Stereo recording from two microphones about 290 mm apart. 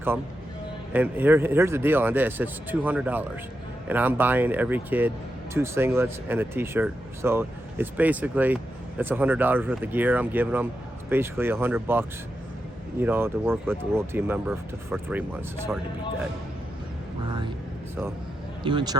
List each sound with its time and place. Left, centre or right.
0.9 s speech: centre
17.2 s speech: centre
18.6 s speech: centre